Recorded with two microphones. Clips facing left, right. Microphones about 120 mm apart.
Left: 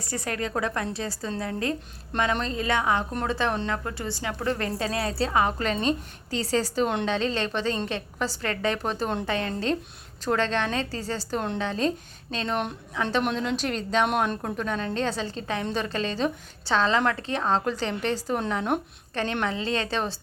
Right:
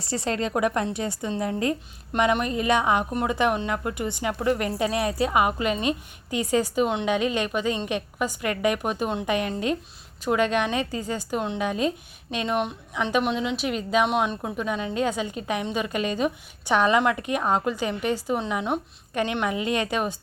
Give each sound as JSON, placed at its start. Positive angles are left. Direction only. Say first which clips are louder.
{"t": 0.1, "sound": "a woman's voice", "louder": "right 4 dB", "side_deg": -25}
{"t": 13.2, "sound": "a woman's voice", "louder": "right 1 dB", "side_deg": 0}